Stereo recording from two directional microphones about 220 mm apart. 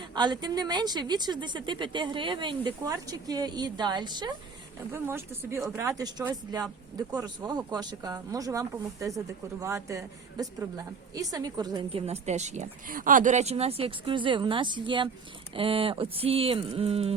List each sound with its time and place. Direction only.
0.1 s a woman's voice: 20° right (ahead or behind)